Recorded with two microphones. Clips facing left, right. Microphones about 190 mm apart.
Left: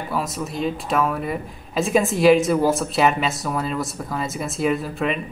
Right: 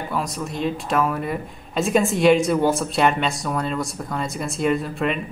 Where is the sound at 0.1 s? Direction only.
Centre (ahead or behind).